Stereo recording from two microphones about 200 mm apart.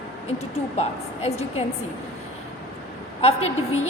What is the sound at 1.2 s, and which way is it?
Speech, 30° left (ahead or behind).